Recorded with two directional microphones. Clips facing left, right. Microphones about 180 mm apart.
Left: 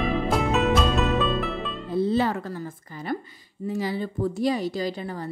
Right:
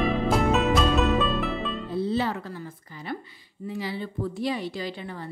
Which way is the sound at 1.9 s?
50° left (ahead or behind).